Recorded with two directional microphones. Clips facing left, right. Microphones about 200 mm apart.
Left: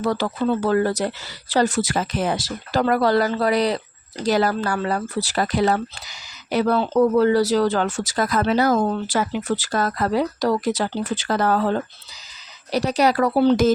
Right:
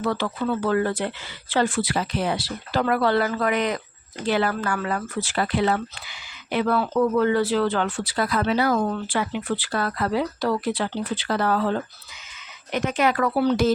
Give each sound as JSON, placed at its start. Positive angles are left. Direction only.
{"t": 0.0, "sound": "speech", "side_deg": 40}